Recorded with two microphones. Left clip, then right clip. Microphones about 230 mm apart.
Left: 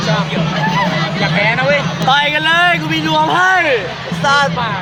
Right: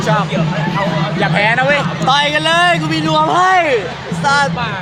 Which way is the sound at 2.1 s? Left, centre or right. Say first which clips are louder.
Left 1 dB; centre.